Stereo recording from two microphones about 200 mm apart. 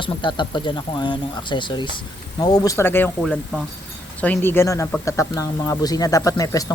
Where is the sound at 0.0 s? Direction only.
25° left (ahead or behind).